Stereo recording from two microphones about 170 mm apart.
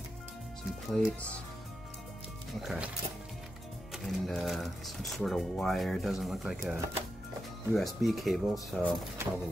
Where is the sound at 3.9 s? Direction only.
Centre (ahead or behind).